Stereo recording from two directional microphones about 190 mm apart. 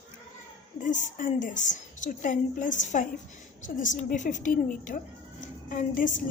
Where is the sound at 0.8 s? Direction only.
40° left (ahead or behind).